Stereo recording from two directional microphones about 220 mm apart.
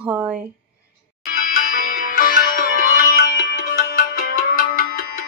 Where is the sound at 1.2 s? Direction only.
40° left (ahead or behind).